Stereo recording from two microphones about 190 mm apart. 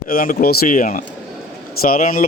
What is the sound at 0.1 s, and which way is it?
A man's voice, 50° left (ahead or behind).